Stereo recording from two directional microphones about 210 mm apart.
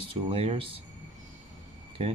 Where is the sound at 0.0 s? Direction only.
25° right (ahead or behind).